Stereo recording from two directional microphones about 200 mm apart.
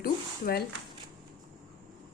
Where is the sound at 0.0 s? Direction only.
50° left (ahead or behind).